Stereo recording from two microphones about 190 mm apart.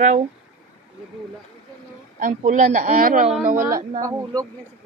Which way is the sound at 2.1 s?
40° right (ahead or behind).